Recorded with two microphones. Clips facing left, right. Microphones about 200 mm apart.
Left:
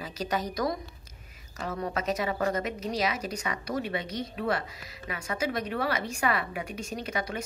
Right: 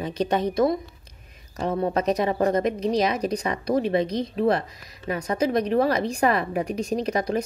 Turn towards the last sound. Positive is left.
turn(degrees=-35)  # may be behind; listen again after turning